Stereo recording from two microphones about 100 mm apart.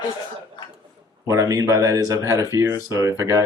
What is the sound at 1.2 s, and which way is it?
Speech, 35° right (ahead or behind).